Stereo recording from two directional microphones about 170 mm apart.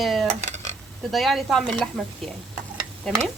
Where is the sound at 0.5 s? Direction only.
40° right (ahead or behind).